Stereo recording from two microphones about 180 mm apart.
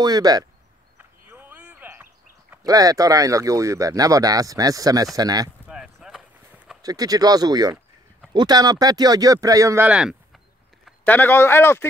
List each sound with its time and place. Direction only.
0.0 s speech: 20° right (ahead or behind)
0.9 s a sound: 10° right (ahead or behind)
2.6 s speech: 20° right (ahead or behind)
5.7 s a sound: 5° right (ahead or behind)
6.8 s speech: 20° right (ahead or behind)
11.1 s speech: 10° left (ahead or behind)